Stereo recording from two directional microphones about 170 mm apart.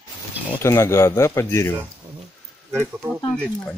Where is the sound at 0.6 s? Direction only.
15° left (ahead or behind).